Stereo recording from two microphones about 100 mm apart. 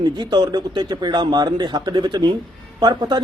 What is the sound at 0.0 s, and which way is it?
A man's voice, 50° right (ahead or behind).